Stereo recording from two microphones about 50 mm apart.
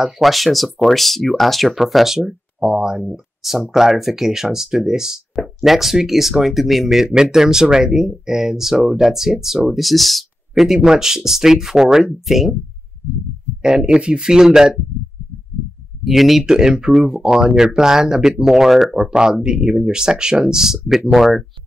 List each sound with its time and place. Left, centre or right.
0.2 s speech: centre
13.6 s speech: centre
16.0 s speech: centre
19.0 s speech: centre